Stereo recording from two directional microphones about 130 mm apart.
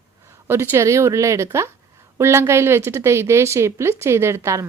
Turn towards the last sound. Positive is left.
turn(degrees=-20)  # may be behind; listen again after turning